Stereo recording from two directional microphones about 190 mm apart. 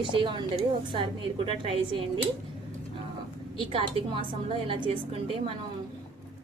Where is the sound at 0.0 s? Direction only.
25° right (ahead or behind).